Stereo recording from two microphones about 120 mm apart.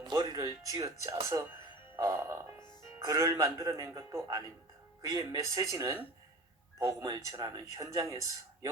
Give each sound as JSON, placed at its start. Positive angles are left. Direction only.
{"t": 0.0, "sound": "speech", "side_deg": -35}